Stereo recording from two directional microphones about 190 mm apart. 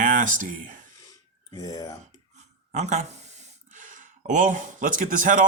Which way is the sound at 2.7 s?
35° right (ahead or behind).